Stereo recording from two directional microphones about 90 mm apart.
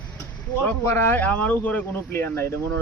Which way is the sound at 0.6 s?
25° left (ahead or behind).